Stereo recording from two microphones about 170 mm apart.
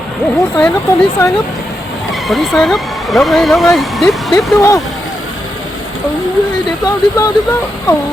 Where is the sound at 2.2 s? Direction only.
Centre (ahead or behind).